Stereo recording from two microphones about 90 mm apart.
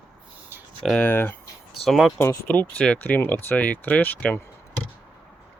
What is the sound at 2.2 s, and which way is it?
Speech, 35° left (ahead or behind).